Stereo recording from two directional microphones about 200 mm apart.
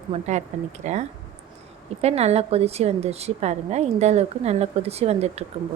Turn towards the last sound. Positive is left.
turn(degrees=-30)  # may be behind; listen again after turning